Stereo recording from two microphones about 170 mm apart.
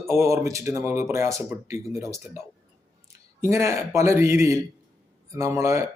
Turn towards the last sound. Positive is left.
turn(degrees=-15)  # may be behind; listen again after turning